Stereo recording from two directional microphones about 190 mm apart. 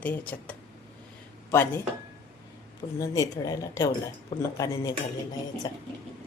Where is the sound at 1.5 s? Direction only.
10° left (ahead or behind).